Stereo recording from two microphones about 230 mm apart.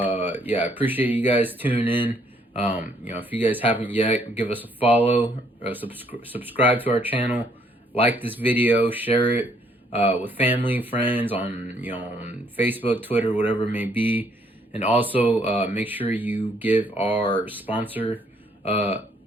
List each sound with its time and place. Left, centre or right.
0.0 s speech: centre
2.5 s speech: left
3.0 s speech: centre